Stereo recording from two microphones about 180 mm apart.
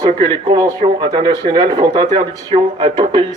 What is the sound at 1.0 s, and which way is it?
Speech, 40° right (ahead or behind).